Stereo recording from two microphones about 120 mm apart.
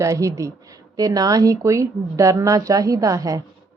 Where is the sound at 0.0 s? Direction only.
25° right (ahead or behind).